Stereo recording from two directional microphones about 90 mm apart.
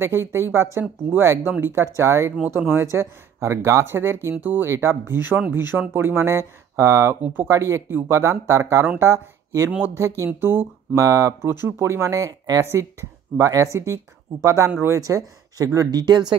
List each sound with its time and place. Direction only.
0.0 s speech: 30° right (ahead or behind)
13.4 s speech: 35° right (ahead or behind)